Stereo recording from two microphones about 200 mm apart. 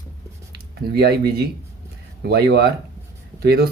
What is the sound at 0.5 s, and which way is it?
Speech, 55° right (ahead or behind).